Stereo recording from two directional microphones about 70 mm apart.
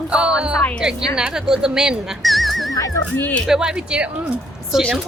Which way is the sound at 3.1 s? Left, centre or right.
Left.